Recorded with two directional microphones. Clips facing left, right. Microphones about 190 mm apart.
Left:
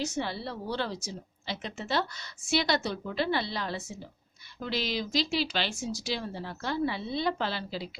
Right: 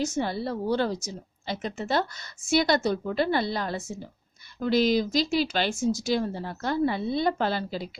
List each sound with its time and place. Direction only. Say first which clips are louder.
0.0 s a woman's voice: right 5 dB; 45° right (ahead or behind)